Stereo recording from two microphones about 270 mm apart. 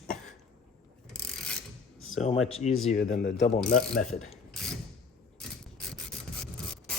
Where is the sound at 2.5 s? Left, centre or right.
Left.